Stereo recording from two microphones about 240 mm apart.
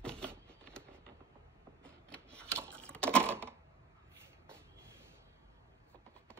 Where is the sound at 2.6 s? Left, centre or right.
Centre.